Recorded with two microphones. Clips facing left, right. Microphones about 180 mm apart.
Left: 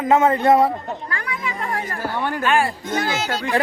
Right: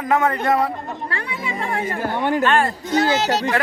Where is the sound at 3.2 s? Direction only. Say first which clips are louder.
Right 4 dB; 40° right (ahead or behind).